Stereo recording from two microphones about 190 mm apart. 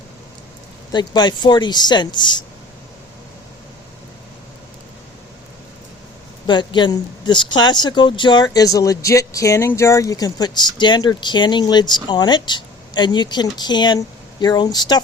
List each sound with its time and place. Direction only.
0.9 s speech: 20° left (ahead or behind)
6.5 s speech: 25° left (ahead or behind)